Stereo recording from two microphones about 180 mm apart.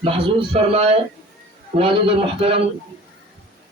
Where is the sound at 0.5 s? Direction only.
35° right (ahead or behind).